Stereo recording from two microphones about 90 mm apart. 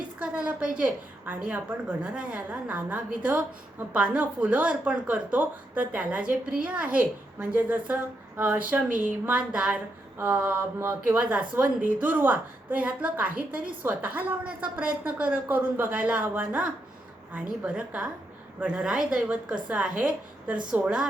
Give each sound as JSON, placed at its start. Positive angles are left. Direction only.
{"t": 0.2, "sound": "a woman's voice", "side_deg": -15}
{"t": 11.2, "sound": "a woman's voice", "side_deg": -15}